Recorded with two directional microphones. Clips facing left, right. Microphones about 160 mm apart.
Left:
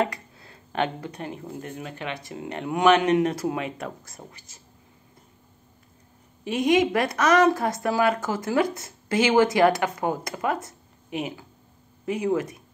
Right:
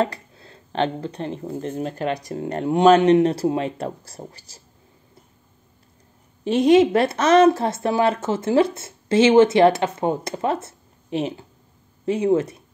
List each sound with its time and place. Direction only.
0.1 s speech: 25° right (ahead or behind)
6.4 s a woman's voice: 30° right (ahead or behind)